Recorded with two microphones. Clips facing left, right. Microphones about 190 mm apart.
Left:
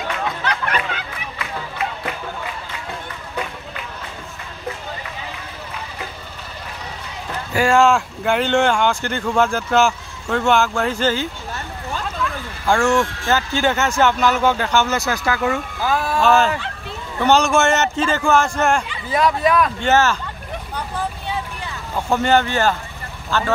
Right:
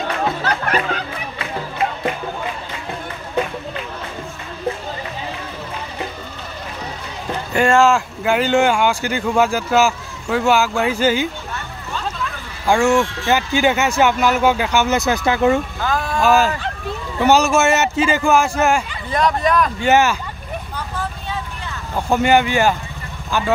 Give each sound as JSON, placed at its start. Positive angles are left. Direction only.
{"t": 0.1, "sound": "music", "side_deg": -35}
{"t": 7.5, "sound": "speech", "side_deg": 0}
{"t": 12.6, "sound": "speech", "side_deg": -10}
{"t": 15.8, "sound": "speech", "side_deg": 5}
{"t": 16.2, "sound": "speech", "side_deg": -10}
{"t": 19.0, "sound": "speech", "side_deg": 5}
{"t": 19.8, "sound": "speech", "side_deg": -10}
{"t": 21.9, "sound": "speech", "side_deg": -10}